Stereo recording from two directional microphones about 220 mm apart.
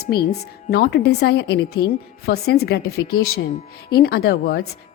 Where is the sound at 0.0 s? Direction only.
45° left (ahead or behind).